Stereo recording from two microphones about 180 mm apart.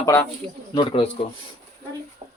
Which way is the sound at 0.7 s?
30° left (ahead or behind).